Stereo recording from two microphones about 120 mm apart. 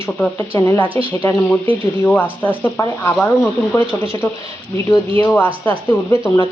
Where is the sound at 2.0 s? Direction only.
15° left (ahead or behind).